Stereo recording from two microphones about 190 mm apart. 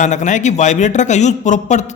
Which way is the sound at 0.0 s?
40° left (ahead or behind).